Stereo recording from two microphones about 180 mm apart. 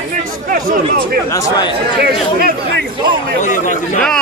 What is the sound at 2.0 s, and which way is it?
Speech, 60° right (ahead or behind).